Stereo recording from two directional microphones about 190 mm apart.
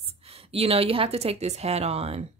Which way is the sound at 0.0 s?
30° right (ahead or behind).